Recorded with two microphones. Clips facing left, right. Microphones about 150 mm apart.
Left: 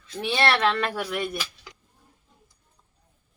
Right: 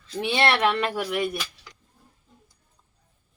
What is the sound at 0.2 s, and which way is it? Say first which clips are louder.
Speech: right 1 dB; 25° right (ahead or behind).